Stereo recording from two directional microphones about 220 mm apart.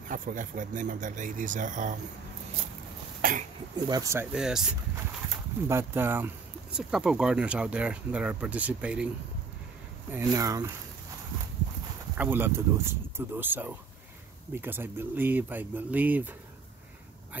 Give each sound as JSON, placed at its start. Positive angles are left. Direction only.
{"t": 0.1, "sound": "speech", "side_deg": -35}
{"t": 3.2, "sound": "speech", "side_deg": -40}
{"t": 3.8, "sound": "speech", "side_deg": -15}
{"t": 10.1, "sound": "speech", "side_deg": -15}
{"t": 12.2, "sound": "speech", "side_deg": -10}